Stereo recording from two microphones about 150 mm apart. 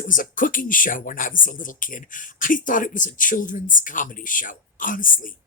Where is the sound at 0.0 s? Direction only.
60° left (ahead or behind).